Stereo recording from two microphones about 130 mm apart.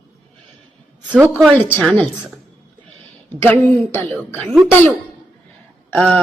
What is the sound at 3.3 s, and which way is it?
Speech, 15° left (ahead or behind).